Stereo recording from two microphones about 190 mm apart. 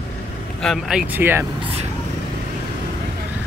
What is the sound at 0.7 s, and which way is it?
Speech, 5° right (ahead or behind).